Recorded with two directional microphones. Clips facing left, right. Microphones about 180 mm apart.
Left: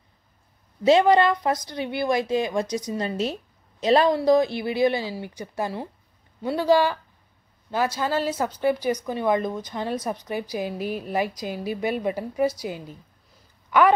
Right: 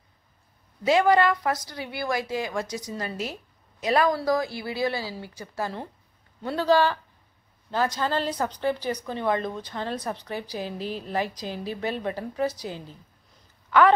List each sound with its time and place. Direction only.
0.8 s a woman's voice: 20° left (ahead or behind)